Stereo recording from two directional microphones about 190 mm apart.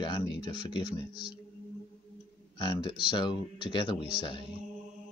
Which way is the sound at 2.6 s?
25° left (ahead or behind).